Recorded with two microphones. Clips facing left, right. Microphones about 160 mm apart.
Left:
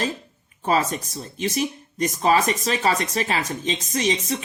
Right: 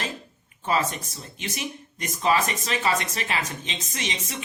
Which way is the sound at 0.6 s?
40° left (ahead or behind).